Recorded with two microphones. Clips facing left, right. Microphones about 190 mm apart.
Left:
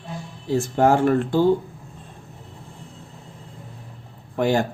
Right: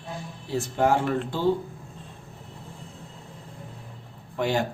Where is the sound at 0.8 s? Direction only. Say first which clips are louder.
Left 5 dB; 45° left (ahead or behind).